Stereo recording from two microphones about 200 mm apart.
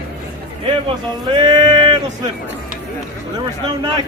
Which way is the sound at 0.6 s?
25° right (ahead or behind).